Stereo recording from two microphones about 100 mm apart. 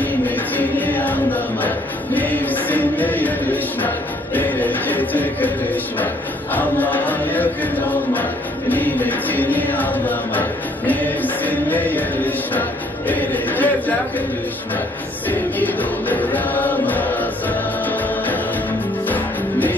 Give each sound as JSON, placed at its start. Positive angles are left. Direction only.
{"t": 0.6, "sound": "a sound", "side_deg": 15}
{"t": 2.1, "sound": "music", "side_deg": 20}
{"t": 4.4, "sound": "speech", "side_deg": 15}
{"t": 6.5, "sound": "speech", "side_deg": 15}
{"t": 10.9, "sound": "music", "side_deg": 15}
{"t": 13.1, "sound": "a sound", "side_deg": 15}
{"t": 15.2, "sound": "music", "side_deg": 15}